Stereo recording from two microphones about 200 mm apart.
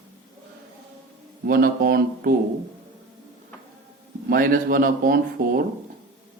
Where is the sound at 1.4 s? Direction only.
45° right (ahead or behind).